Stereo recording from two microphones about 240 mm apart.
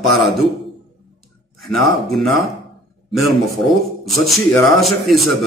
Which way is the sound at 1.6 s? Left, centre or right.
Centre.